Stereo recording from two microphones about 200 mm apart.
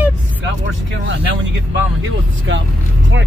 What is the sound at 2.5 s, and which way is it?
Speech, 65° right (ahead or behind).